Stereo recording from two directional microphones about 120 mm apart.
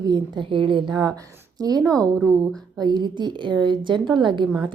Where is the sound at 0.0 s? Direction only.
40° right (ahead or behind).